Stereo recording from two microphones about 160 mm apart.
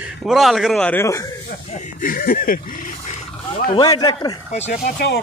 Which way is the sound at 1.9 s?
60° left (ahead or behind).